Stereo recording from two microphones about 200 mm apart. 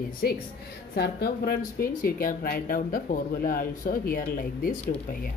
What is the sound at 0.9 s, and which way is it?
Speech, 50° left (ahead or behind).